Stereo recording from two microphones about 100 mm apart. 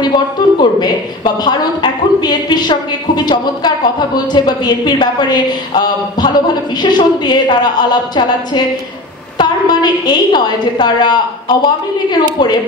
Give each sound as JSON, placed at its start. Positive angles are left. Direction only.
{"t": 0.6, "sound": "a woman's voice", "side_deg": 45}